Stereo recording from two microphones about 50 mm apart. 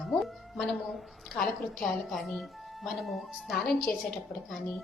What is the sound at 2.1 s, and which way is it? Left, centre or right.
Speech, centre.